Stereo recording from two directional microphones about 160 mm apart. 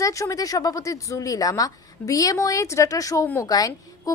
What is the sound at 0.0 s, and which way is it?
A woman's voice, 20° left (ahead or behind).